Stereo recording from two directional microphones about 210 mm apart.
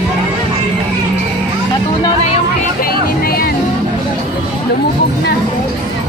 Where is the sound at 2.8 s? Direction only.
45° left (ahead or behind).